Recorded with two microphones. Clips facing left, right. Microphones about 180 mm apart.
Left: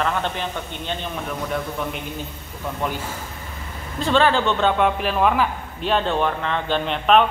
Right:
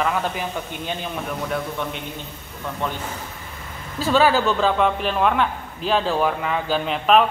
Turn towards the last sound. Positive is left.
turn(degrees=-5)  # may be behind; listen again after turning